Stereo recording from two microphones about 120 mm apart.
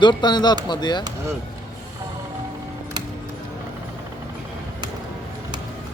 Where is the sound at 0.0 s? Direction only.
40° left (ahead or behind).